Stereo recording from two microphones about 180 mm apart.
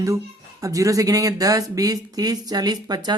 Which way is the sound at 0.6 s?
20° right (ahead or behind).